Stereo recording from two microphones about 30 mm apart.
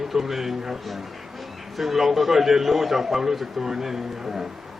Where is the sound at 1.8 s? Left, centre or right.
Centre.